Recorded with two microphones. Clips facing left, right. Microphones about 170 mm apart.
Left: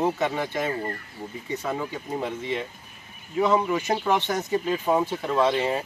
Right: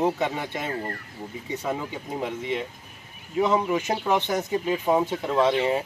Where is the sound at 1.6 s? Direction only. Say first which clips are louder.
Right 1 dB; 10° right (ahead or behind).